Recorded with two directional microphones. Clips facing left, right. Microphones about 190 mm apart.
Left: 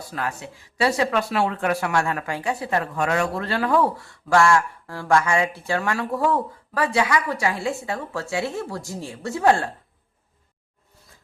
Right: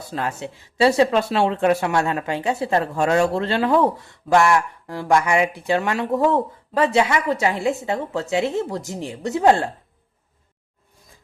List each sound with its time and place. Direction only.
0.0 s speech: 25° right (ahead or behind)